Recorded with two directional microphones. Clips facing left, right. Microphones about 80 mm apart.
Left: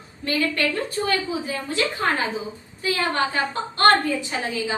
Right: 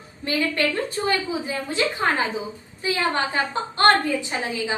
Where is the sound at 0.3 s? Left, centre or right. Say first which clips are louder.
Even; right.